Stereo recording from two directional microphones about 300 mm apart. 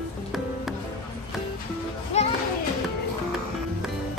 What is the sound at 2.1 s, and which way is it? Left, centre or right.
Children playing, left.